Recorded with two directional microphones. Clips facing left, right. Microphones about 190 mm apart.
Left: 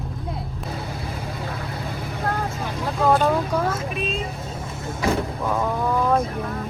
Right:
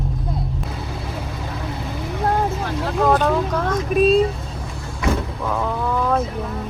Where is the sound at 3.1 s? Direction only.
10° left (ahead or behind).